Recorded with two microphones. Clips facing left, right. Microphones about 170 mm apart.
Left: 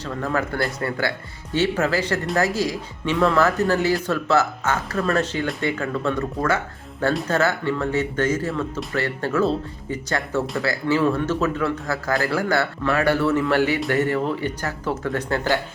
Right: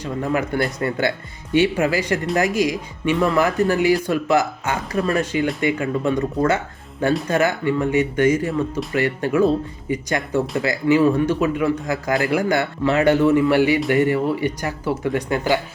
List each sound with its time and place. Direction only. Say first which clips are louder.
0.0 s speech: right 2 dB; 15° right (ahead or behind)